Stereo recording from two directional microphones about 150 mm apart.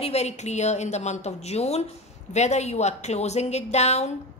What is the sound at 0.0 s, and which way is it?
A woman's voice, 45° left (ahead or behind).